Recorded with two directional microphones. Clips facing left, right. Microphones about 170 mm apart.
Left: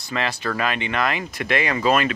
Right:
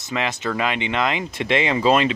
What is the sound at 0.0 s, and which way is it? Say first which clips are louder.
Speech: right 1 dB; 20° right (ahead or behind).